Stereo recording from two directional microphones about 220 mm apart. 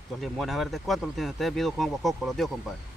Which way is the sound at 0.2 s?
Centre (ahead or behind).